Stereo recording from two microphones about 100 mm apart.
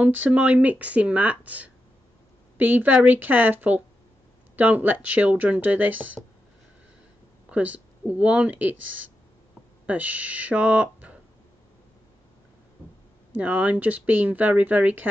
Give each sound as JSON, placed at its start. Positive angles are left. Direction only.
{"t": 0.0, "sound": "speech", "side_deg": -15}
{"t": 7.4, "sound": "speech", "side_deg": -15}
{"t": 9.8, "sound": "speech", "side_deg": -15}
{"t": 13.4, "sound": "speech", "side_deg": -15}